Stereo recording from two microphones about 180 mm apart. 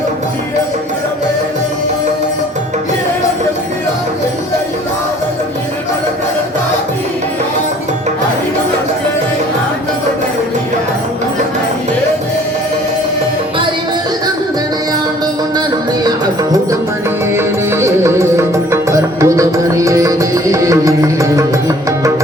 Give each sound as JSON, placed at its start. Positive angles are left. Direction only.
{"t": 16.0, "sound": "music", "side_deg": -20}